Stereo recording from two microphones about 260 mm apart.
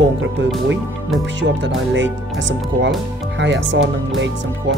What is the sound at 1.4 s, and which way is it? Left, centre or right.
Speech, right.